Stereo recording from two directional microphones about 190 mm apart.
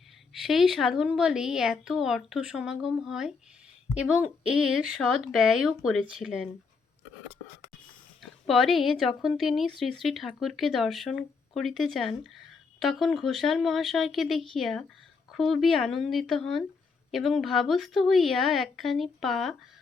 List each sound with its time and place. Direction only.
0.3 s speech: centre (ahead or behind)
8.2 s speech: centre (ahead or behind)